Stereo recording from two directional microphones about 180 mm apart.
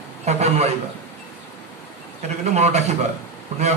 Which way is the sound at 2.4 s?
35° right (ahead or behind).